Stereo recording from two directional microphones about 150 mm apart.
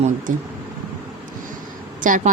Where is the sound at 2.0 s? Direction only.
60° right (ahead or behind).